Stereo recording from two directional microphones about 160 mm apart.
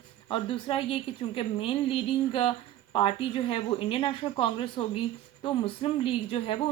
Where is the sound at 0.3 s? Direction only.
35° left (ahead or behind).